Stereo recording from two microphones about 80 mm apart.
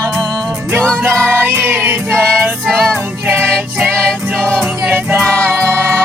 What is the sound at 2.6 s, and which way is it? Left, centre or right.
Music, centre.